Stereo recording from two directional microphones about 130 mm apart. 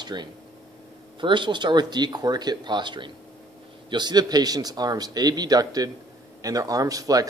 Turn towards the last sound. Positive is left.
turn(degrees=-30)  # may be behind; listen again after turning